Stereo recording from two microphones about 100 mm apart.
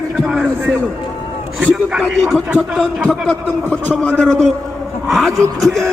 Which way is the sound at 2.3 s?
Centre (ahead or behind).